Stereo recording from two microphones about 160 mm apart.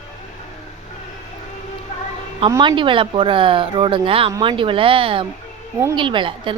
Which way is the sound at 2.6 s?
30° right (ahead or behind).